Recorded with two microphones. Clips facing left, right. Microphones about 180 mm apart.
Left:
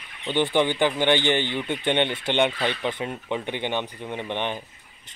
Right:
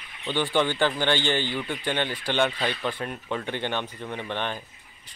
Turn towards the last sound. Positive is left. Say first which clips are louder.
# left 2 dB
turn(degrees=20)  # may be behind; listen again after turning